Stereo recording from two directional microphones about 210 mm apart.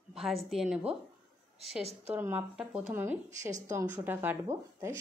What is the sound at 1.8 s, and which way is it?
Speech, 30° right (ahead or behind).